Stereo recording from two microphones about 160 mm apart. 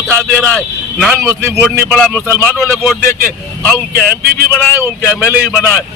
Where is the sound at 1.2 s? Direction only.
15° right (ahead or behind).